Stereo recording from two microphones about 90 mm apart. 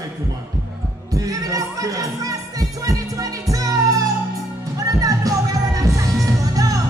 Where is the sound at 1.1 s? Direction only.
40° right (ahead or behind).